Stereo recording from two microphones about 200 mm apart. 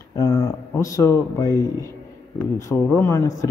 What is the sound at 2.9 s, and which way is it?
Speech, 10° left (ahead or behind).